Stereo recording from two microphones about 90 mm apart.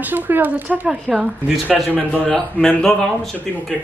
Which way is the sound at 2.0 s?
15° left (ahead or behind).